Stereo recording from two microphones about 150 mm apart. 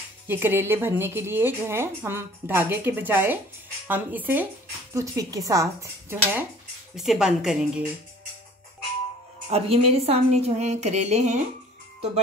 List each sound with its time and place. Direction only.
0.3 s speech: 15° right (ahead or behind)
4.9 s speech: 20° right (ahead or behind)
7.0 s a woman's voice: 5° right (ahead or behind)
9.5 s a woman's voice: 45° right (ahead or behind)